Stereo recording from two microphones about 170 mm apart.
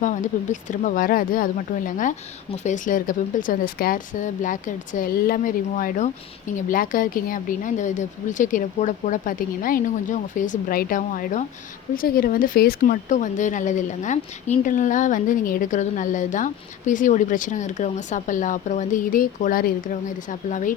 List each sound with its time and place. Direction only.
0.0 s a woman's voice: 50° left (ahead or behind)
11.9 s a woman's voice: 60° left (ahead or behind)